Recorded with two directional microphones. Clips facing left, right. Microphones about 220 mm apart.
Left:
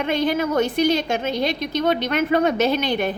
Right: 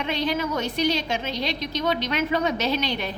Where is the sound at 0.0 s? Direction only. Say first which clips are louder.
Left 5 dB; 50° left (ahead or behind).